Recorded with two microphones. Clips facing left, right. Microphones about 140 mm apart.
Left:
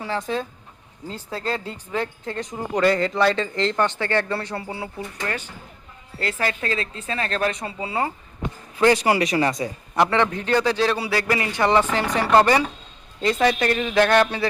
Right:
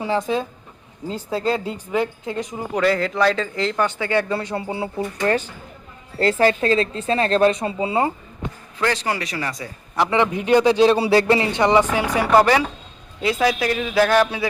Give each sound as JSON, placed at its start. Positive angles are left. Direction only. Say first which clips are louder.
{"t": 0.0, "sound": "a woman's voice", "louder": "right 4 dB", "side_deg": -15}
{"t": 8.8, "sound": "speech", "louder": "left 5 dB", "side_deg": 10}
{"t": 10.1, "sound": "a woman's voice", "louder": "right 3 dB", "side_deg": -15}